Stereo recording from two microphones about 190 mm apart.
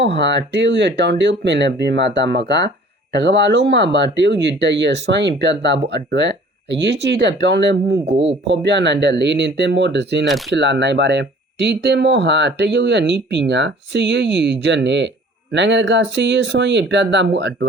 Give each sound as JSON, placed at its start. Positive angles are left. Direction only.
{"t": 0.0, "sound": "speech", "side_deg": -65}
{"t": 8.1, "sound": "speech", "side_deg": -30}
{"t": 8.4, "sound": "speech", "side_deg": -65}